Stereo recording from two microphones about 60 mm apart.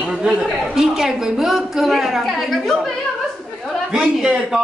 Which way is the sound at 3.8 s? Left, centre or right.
Centre.